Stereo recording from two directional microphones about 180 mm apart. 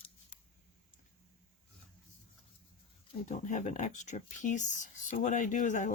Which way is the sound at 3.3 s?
40° left (ahead or behind).